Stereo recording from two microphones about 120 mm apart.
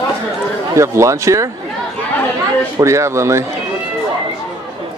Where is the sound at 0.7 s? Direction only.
25° right (ahead or behind).